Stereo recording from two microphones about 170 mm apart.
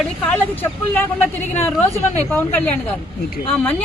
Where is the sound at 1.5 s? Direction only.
10° left (ahead or behind).